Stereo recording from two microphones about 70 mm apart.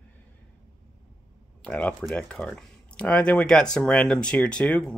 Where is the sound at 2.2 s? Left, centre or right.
Centre.